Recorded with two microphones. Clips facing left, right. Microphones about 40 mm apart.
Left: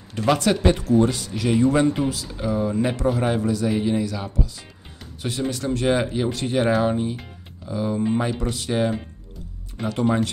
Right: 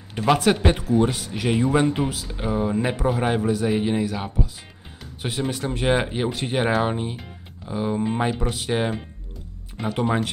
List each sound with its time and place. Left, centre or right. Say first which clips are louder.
0.1 s speech: right 1 dB; centre
5.5 s speech: left 1 dB; centre